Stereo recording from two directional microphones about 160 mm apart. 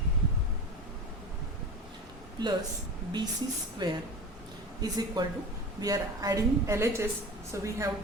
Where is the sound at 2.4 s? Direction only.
25° right (ahead or behind).